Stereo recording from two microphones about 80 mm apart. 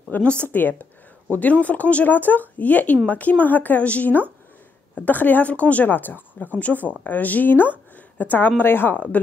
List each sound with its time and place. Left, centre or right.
0.1 s a woman's voice: centre